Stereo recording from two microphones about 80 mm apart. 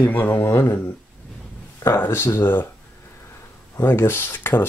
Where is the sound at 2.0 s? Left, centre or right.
Left.